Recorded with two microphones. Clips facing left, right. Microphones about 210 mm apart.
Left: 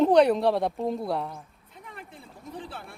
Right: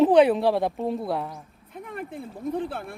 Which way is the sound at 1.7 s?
55° right (ahead or behind).